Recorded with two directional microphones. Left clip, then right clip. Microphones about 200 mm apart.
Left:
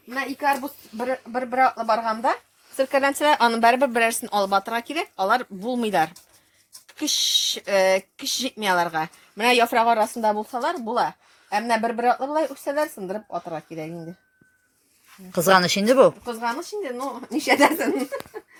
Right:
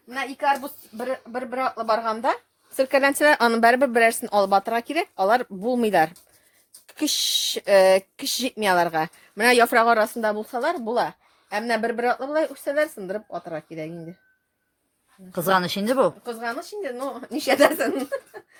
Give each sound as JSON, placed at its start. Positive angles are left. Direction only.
{"t": 0.9, "sound": "speech", "side_deg": -15}
{"t": 15.3, "sound": "speech", "side_deg": 0}
{"t": 16.2, "sound": "speech", "side_deg": -15}